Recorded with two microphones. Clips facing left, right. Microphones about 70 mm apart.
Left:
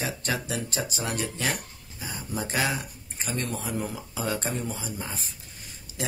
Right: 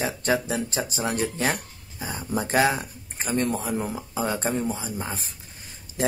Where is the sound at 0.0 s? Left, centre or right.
Right.